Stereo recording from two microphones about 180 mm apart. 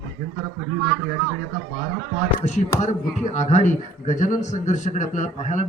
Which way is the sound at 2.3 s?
40° left (ahead or behind).